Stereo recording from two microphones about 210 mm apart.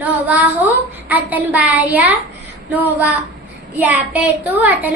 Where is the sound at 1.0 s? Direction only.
5° right (ahead or behind).